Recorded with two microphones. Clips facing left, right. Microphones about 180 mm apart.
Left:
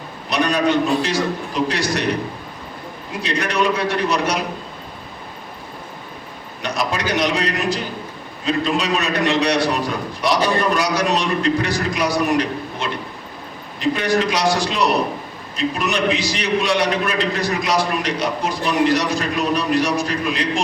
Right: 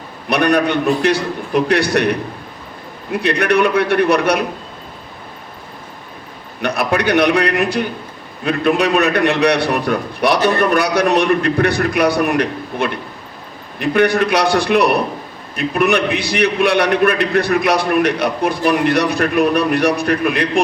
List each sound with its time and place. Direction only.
0.3 s a man's voice: 60° right (ahead or behind)
6.6 s a man's voice: 60° right (ahead or behind)